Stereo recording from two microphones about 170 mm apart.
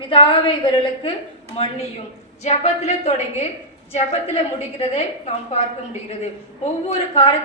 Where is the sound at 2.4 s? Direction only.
40° left (ahead or behind).